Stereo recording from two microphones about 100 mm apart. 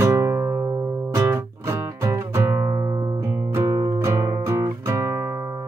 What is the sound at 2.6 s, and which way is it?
Music, 40° right (ahead or behind).